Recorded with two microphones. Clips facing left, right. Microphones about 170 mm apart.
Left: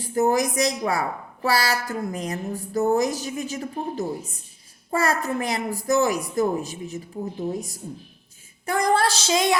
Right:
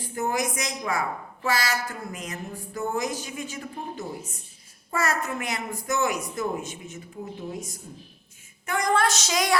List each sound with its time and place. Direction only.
0.1 s a woman's voice: 40° left (ahead or behind)
8.6 s a woman's voice: 35° left (ahead or behind)